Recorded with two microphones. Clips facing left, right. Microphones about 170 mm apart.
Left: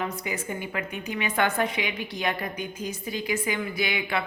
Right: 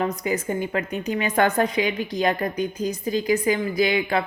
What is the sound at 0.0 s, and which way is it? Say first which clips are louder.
Speech: right 7 dB; 35° right (ahead or behind).